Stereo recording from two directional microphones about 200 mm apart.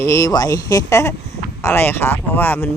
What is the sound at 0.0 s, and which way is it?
Speech, 15° left (ahead or behind).